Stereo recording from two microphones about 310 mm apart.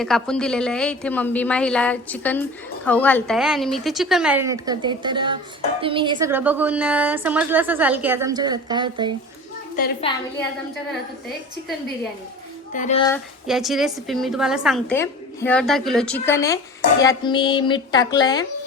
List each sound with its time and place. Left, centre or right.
0.0 s a woman's voice: centre
10.0 s speech: centre
12.7 s speech: left
13.1 s a woman's voice: centre